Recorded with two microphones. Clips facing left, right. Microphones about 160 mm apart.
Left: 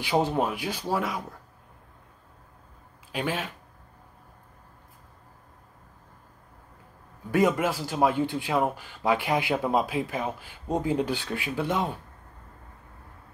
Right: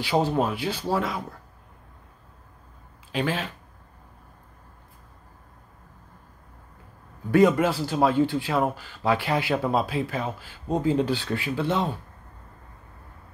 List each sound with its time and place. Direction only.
0.0 s a man's voice: 15° left (ahead or behind)
3.1 s a man's voice: 10° left (ahead or behind)
7.2 s a man's voice: 10° left (ahead or behind)